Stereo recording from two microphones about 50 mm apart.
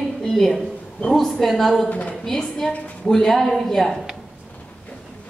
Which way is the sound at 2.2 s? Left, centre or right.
Centre.